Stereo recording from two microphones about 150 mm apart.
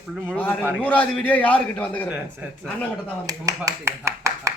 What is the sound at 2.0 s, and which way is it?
Speech, 10° right (ahead or behind).